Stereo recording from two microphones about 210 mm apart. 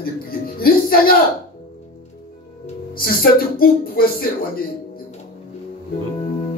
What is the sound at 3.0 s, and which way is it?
Speech, 45° left (ahead or behind).